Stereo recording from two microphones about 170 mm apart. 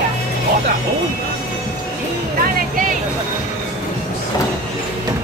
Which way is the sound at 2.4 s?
55° right (ahead or behind).